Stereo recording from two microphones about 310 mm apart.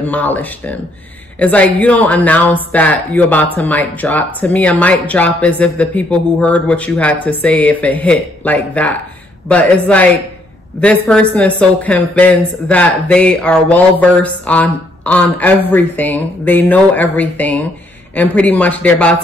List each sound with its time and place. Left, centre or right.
0.0 s speech: centre